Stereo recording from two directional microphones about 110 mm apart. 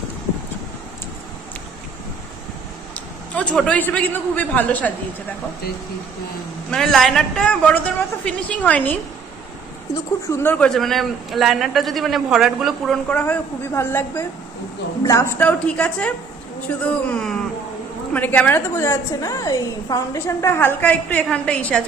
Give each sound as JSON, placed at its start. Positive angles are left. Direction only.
{"t": 2.9, "sound": "a man's voice", "side_deg": 10}
{"t": 6.7, "sound": "a woman's voice", "side_deg": 5}
{"t": 9.9, "sound": "a woman's voice", "side_deg": 25}
{"t": 10.7, "sound": "a man's voice", "side_deg": 0}
{"t": 15.4, "sound": "a woman's voice", "side_deg": 10}
{"t": 20.1, "sound": "a woman's voice", "side_deg": 20}